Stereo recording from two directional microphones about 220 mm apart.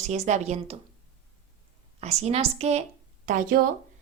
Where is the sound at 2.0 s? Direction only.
30° right (ahead or behind).